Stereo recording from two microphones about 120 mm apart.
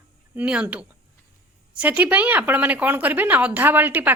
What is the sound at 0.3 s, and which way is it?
A woman's voice, 10° right (ahead or behind).